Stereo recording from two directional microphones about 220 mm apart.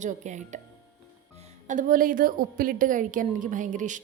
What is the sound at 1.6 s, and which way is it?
A woman's voice, 35° right (ahead or behind).